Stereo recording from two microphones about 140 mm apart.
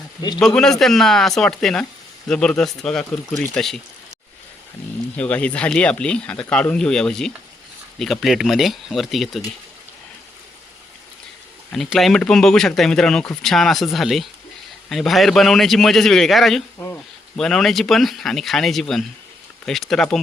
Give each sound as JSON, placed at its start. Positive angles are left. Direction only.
{"t": 0.2, "sound": "speech", "side_deg": 30}
{"t": 0.4, "sound": "speech", "side_deg": 5}
{"t": 5.1, "sound": "speech", "side_deg": 10}
{"t": 11.7, "sound": "speech", "side_deg": 0}
{"t": 16.7, "sound": "a sound", "side_deg": 15}
{"t": 17.3, "sound": "speech", "side_deg": 5}